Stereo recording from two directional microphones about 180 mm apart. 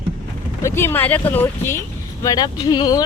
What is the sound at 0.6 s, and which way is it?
Speech, 15° left (ahead or behind).